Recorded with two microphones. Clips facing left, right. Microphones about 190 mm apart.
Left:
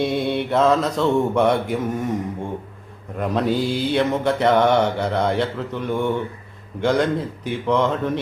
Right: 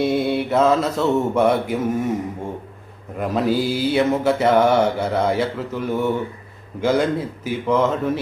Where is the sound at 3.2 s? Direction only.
5° right (ahead or behind).